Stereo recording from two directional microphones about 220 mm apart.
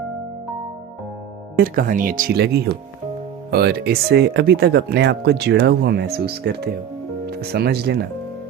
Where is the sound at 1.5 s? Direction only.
40° right (ahead or behind).